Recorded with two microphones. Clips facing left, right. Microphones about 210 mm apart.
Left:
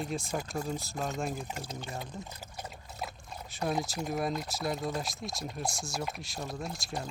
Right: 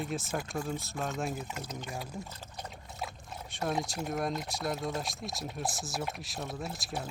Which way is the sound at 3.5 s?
Centre (ahead or behind).